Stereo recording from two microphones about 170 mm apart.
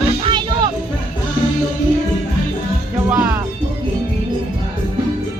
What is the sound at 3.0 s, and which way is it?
Music, 10° right (ahead or behind).